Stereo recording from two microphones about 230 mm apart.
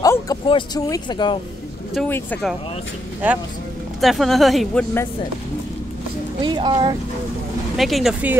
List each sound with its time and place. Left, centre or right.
0.0 s speech: centre
2.0 s speech: centre
3.2 s speech: centre
6.4 s speech: centre
7.7 s speech: centre